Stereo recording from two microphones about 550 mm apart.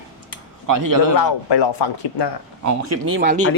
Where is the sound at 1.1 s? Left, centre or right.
Left.